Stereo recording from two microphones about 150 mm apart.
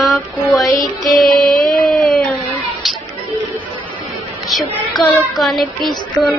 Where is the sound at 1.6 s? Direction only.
5° left (ahead or behind).